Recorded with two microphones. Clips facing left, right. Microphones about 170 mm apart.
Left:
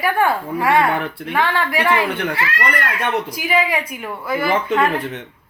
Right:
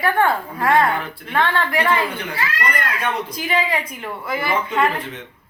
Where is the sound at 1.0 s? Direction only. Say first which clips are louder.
Left 5 dB; 65° left (ahead or behind).